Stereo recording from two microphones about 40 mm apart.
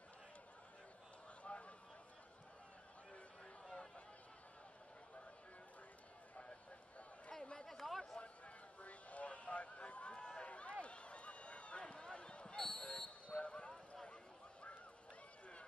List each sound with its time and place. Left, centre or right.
1.4 s a sound: left
7.6 s chatter: centre
8.8 s a sound: left
10.1 s run: left
12.5 s basketball bounce: centre
13.3 s basketball bounce: left